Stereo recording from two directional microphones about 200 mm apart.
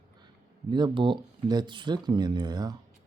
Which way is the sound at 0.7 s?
25° right (ahead or behind).